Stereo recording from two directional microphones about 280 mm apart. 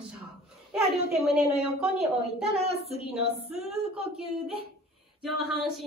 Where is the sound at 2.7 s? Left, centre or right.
Right.